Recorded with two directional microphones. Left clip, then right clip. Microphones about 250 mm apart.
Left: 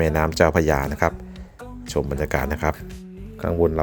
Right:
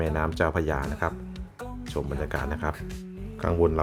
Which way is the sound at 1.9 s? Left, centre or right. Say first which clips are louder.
Left 8 dB; centre.